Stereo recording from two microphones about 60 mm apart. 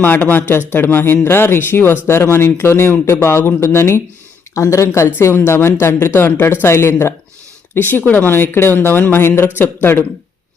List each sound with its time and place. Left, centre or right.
0.0 s speech: left
5.2 s speech: left
7.8 s speech: left